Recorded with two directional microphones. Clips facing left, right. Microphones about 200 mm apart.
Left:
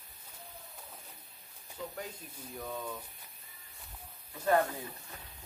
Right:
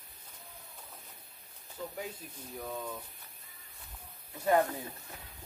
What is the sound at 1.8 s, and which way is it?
Speech, 5° right (ahead or behind).